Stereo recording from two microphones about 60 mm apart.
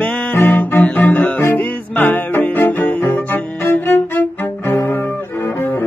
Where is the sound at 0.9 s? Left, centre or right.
Left.